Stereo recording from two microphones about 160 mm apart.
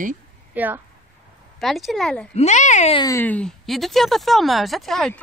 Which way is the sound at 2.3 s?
45° left (ahead or behind).